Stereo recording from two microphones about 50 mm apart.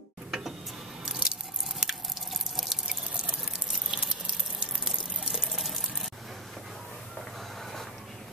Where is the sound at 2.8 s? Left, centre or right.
Centre.